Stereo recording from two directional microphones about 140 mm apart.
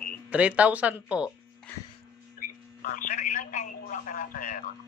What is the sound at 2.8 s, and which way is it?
Speech, 75° left (ahead or behind).